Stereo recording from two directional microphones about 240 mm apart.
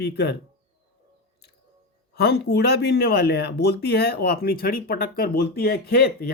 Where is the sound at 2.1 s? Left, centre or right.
Left.